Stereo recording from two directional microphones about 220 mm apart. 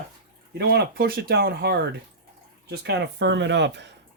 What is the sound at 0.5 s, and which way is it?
Speech, 50° right (ahead or behind).